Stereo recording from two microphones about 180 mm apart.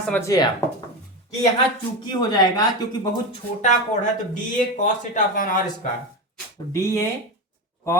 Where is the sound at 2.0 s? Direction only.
25° left (ahead or behind).